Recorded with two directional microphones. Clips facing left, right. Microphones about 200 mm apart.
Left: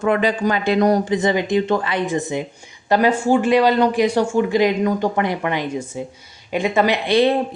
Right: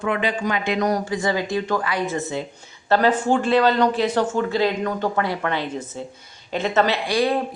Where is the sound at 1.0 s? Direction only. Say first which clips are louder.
Left 5 dB; 20° left (ahead or behind).